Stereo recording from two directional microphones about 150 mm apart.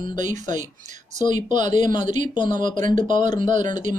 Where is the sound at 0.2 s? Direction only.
55° right (ahead or behind).